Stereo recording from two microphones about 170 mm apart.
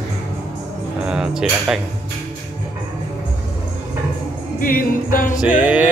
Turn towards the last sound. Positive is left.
turn(degrees=-10)  # may be behind; listen again after turning